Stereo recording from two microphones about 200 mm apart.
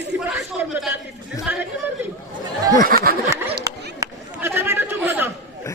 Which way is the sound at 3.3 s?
10° right (ahead or behind).